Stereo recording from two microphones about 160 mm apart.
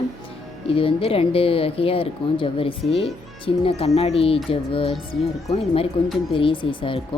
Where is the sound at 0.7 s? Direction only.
35° left (ahead or behind).